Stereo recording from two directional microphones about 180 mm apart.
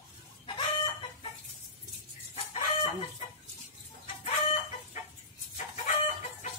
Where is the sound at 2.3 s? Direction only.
35° left (ahead or behind).